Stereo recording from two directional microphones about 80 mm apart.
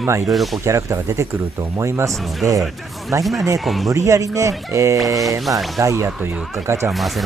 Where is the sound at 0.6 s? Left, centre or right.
Right.